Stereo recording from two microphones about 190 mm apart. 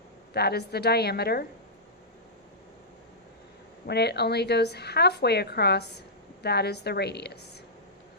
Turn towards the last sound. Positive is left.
turn(degrees=60)  # may be behind; listen again after turning